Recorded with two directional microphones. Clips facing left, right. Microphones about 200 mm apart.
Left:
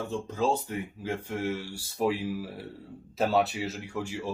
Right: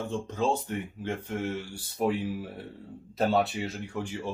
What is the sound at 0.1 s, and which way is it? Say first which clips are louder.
Speech: left 1 dB; 5° left (ahead or behind).